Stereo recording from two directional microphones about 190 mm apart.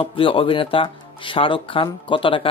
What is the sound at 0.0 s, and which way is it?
Speech, 30° left (ahead or behind).